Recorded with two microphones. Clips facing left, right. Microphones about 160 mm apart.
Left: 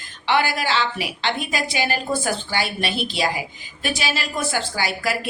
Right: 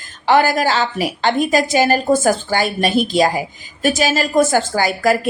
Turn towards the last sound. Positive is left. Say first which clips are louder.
# right 9 dB
turn(degrees=-45)  # may be behind; listen again after turning